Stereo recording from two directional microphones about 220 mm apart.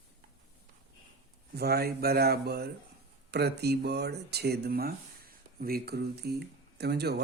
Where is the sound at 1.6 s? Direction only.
45° right (ahead or behind).